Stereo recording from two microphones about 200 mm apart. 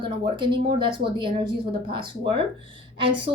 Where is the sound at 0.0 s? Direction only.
25° right (ahead or behind).